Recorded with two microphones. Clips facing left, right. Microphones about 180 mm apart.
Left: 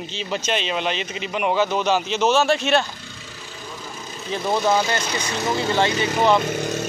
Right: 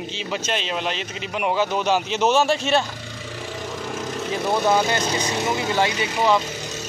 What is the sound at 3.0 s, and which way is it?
Vehicle, 90° right.